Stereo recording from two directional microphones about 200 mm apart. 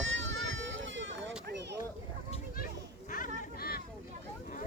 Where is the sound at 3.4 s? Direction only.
50° left (ahead or behind).